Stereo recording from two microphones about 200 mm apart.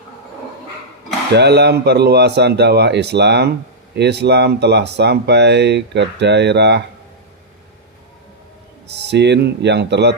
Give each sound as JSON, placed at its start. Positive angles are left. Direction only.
{"t": 1.3, "sound": "speech", "side_deg": -55}
{"t": 9.0, "sound": "speech", "side_deg": -60}